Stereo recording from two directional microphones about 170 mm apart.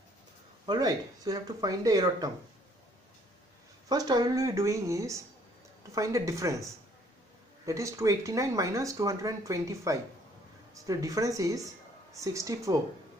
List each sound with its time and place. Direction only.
0.7 s speech: 20° right (ahead or behind)
3.9 s speech: 25° right (ahead or behind)
7.6 s speech: 20° right (ahead or behind)